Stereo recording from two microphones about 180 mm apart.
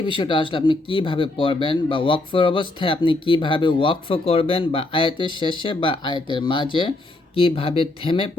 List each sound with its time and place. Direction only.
0.0 s speech: 25° left (ahead or behind)